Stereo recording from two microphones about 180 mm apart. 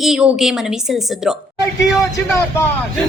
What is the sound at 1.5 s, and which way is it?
Speech, 20° left (ahead or behind).